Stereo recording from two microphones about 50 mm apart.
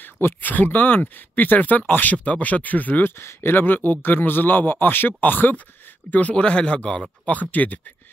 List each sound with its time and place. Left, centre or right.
0.0 s speech: left
2.1 s speech: left
3.0 s speech: left